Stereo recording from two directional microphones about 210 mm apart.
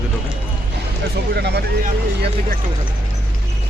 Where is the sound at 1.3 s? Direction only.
50° right (ahead or behind).